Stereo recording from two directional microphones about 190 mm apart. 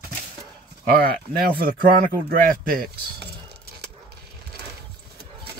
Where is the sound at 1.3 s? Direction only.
50° right (ahead or behind).